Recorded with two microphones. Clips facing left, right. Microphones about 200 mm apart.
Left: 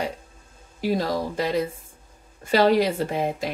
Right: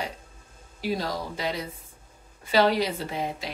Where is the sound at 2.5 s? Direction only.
50° left (ahead or behind).